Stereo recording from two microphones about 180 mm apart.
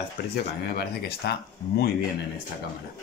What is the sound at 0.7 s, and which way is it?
Mantra, 60° left (ahead or behind).